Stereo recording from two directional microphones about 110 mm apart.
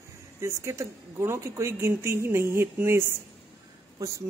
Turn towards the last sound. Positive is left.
turn(degrees=-30)  # may be behind; listen again after turning